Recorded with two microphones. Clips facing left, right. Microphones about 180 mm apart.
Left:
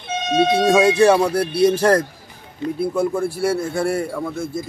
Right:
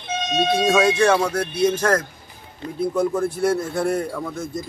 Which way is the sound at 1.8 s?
30° left (ahead or behind).